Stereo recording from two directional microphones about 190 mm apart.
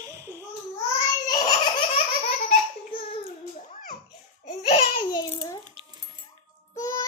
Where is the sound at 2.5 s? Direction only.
30° left (ahead or behind).